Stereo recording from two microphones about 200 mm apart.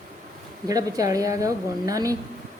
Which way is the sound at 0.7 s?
15° right (ahead or behind).